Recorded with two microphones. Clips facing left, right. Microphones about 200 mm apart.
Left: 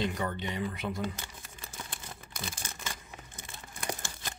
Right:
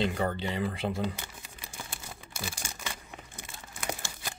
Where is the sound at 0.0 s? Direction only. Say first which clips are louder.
Right 3 dB; 30° right (ahead or behind).